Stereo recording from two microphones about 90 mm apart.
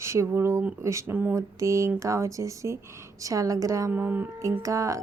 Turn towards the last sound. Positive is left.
turn(degrees=-35)  # may be behind; listen again after turning